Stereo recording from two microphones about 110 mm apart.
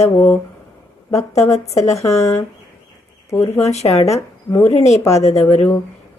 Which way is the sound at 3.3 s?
35° left (ahead or behind).